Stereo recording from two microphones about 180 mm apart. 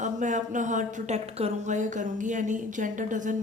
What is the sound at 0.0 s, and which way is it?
A woman's voice, 45° right (ahead or behind).